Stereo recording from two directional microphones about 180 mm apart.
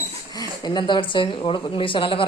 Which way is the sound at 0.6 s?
25° left (ahead or behind).